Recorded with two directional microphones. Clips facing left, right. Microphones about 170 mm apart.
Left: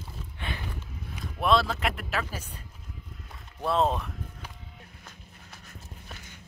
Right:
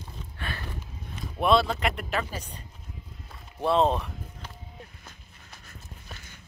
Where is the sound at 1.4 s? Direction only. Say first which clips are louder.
Right 2 dB; centre (ahead or behind).